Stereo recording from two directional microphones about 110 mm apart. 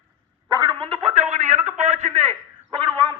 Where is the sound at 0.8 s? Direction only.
60° right (ahead or behind); by 2.2 s 85° right.